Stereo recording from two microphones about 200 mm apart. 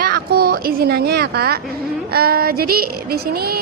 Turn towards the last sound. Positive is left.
turn(degrees=-50)  # may be behind; listen again after turning